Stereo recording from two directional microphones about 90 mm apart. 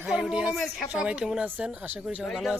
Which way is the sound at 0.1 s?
5° right (ahead or behind).